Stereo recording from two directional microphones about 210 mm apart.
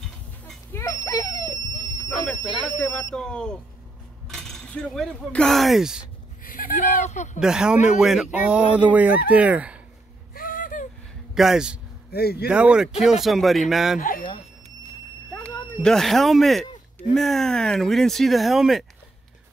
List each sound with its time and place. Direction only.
0.5 s a sound: 10° left (ahead or behind)
2.0 s a sound: 5° left (ahead or behind)
2.4 s speech: centre (ahead or behind)
6.4 s speech: 40° left (ahead or behind)
7.3 s speech: 5° right (ahead or behind)
10.3 s a sound: 40° left (ahead or behind)
11.3 s speech: centre (ahead or behind)
12.1 s speech: 50° left (ahead or behind)
12.4 s speech: 5° right (ahead or behind)
13.9 s speech: 40° left (ahead or behind)
15.3 s speech: 5° left (ahead or behind)